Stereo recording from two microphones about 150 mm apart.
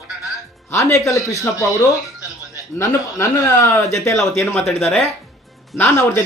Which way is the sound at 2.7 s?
20° left (ahead or behind).